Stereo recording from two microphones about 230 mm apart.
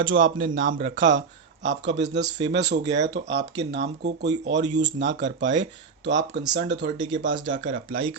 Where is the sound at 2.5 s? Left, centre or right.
Right.